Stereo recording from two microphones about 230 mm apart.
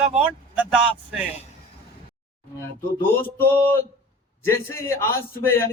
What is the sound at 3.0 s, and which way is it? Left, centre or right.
A man's voice, centre.